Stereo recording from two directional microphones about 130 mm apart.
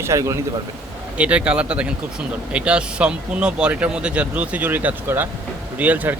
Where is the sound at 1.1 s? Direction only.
10° right (ahead or behind).